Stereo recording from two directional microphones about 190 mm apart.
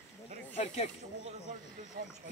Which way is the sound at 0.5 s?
35° left (ahead or behind).